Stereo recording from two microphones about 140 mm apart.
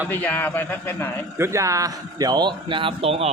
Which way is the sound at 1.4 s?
20° right (ahead or behind).